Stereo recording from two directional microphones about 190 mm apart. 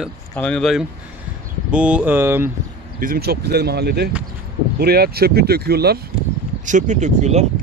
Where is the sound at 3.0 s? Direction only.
50° right (ahead or behind).